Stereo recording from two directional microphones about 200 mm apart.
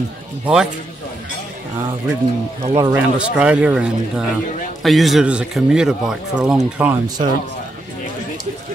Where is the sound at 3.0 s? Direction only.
5° right (ahead or behind).